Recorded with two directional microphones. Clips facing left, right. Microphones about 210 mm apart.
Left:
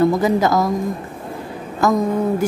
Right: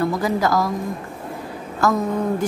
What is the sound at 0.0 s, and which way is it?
Speech, 20° left (ahead or behind).